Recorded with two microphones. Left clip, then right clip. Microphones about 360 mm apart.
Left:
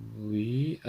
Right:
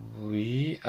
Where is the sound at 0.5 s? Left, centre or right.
Centre.